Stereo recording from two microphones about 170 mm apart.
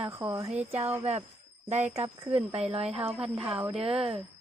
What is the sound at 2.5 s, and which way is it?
Speech, 35° right (ahead or behind).